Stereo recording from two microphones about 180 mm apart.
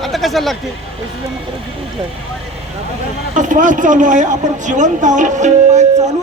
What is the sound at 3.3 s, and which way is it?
A woman's voice, 45° right (ahead or behind).